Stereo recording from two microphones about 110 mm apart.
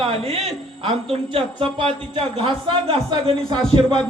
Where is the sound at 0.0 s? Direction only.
60° right (ahead or behind).